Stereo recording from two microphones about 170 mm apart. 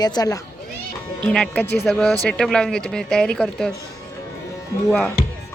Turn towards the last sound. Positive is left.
turn(degrees=10)  # may be behind; listen again after turning